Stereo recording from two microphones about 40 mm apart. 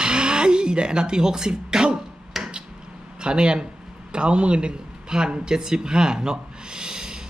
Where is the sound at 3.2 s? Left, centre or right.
Right.